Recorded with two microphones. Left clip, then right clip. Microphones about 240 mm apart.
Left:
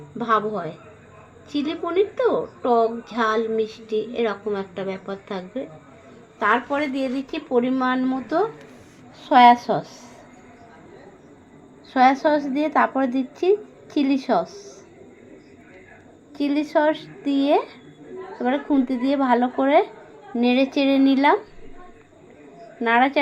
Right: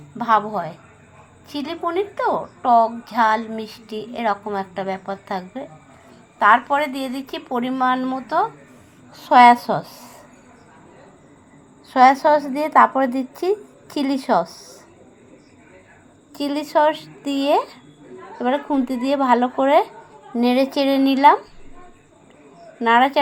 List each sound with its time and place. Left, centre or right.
0.2 s a woman's voice: right
11.9 s a woman's voice: right
16.3 s a woman's voice: right
22.8 s a woman's voice: right